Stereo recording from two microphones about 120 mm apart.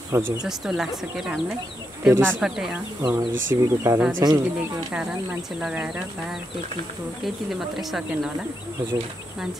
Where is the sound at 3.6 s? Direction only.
20° right (ahead or behind).